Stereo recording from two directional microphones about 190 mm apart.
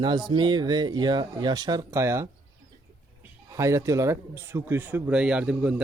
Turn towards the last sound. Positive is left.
turn(degrees=-5)  # may be behind; listen again after turning